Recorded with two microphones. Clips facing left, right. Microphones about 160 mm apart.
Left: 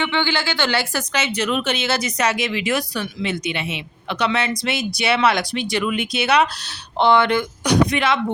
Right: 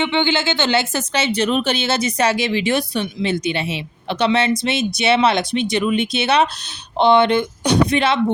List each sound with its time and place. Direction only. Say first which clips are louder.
0.0 s speech: right 3 dB; 20° right (ahead or behind)